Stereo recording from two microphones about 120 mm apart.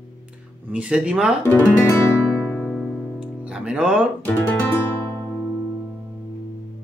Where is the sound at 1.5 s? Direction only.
15° left (ahead or behind).